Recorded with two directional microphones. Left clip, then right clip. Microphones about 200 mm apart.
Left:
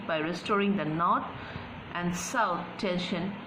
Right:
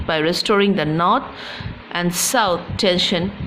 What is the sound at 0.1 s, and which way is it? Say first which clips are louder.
A woman's voice: right 12 dB; 50° right (ahead or behind).